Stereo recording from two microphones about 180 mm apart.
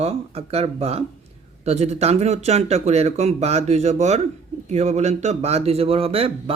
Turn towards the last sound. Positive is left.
turn(degrees=-30)  # may be behind; listen again after turning